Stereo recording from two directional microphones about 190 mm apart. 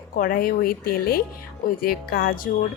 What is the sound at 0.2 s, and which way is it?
Speech, 50° left (ahead or behind).